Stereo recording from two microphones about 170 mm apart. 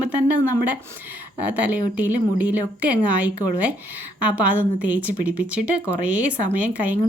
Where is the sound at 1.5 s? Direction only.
10° right (ahead or behind).